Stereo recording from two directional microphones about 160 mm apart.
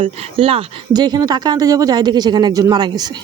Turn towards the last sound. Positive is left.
turn(degrees=-25)  # may be behind; listen again after turning